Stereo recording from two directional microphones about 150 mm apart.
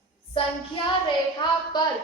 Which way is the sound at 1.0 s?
30° left (ahead or behind).